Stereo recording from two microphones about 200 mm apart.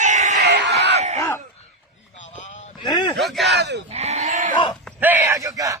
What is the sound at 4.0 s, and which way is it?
Sheep, 35° right (ahead or behind).